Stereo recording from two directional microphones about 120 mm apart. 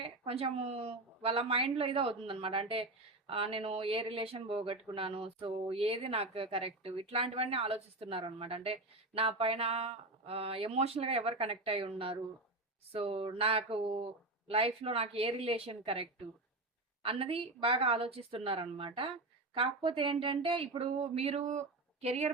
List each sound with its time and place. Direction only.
0.0 s a woman's voice: 50° right (ahead or behind)